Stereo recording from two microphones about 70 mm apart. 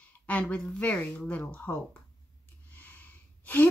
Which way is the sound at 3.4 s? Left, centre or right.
Left.